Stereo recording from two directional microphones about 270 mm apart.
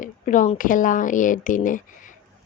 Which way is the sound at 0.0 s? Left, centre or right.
Left.